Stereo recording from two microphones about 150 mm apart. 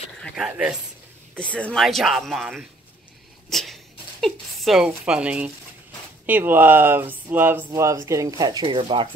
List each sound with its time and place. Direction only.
0.5 s speech: 10° right (ahead or behind)
1.4 s speech: 10° left (ahead or behind); by 9.1 s 35° right (ahead or behind)